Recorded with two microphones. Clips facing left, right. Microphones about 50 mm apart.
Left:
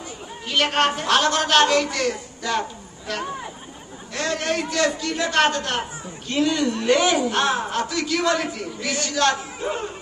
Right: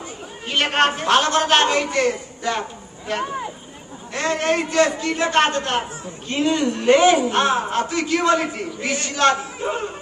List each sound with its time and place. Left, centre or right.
0.4 s a man's voice: right
4.1 s a man's voice: right